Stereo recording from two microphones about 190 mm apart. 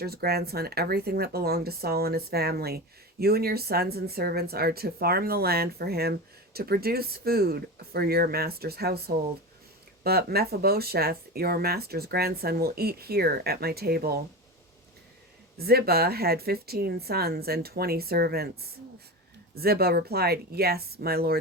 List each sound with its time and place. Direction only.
0.0 s speech: 55° right (ahead or behind)
15.5 s speech: 55° right (ahead or behind)
19.5 s speech: 55° right (ahead or behind)